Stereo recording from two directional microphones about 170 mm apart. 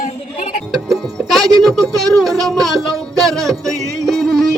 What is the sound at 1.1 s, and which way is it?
Music, centre (ahead or behind).